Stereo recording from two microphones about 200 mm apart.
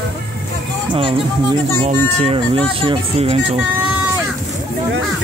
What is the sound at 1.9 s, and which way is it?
Speech, 30° right (ahead or behind).